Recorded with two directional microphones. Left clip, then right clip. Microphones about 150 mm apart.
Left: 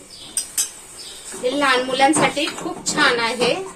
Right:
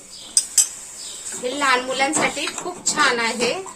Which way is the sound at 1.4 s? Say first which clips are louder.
Left 2 dB; 40° right (ahead or behind).